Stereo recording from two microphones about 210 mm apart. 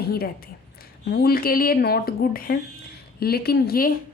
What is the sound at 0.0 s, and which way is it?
A woman's voice, 45° left (ahead or behind).